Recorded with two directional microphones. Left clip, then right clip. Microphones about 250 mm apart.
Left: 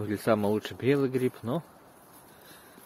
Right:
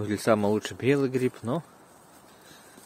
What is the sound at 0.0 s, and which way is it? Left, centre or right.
Speech, centre.